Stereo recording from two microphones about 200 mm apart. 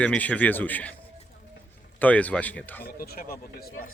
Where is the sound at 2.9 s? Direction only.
50° left (ahead or behind).